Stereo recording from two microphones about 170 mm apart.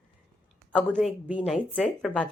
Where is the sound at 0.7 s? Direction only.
5° left (ahead or behind).